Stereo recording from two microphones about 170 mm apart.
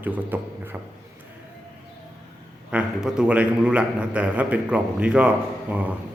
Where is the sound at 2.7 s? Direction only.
5° right (ahead or behind).